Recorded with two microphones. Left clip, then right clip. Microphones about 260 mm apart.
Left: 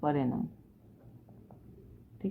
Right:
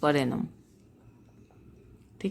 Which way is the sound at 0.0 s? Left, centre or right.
Right.